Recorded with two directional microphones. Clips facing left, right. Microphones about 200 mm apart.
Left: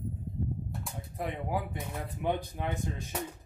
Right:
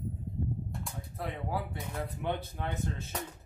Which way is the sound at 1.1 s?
15° left (ahead or behind).